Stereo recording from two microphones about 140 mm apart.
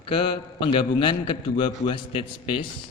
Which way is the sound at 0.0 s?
40° left (ahead or behind).